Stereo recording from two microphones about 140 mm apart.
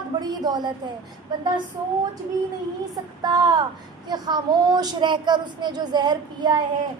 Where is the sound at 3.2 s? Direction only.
30° right (ahead or behind).